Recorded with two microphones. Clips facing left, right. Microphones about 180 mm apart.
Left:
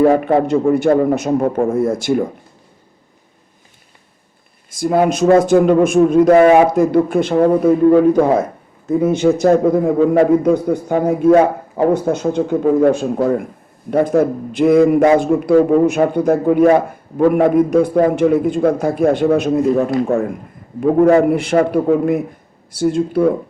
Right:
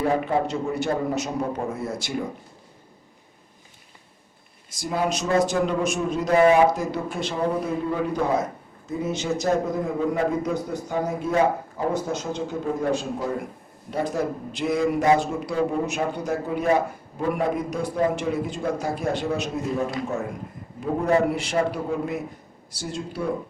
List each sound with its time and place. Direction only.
0.0 s a man's voice: 65° left (ahead or behind)
4.7 s a man's voice: 55° left (ahead or behind)
16.6 s a man's voice: 65° left (ahead or behind)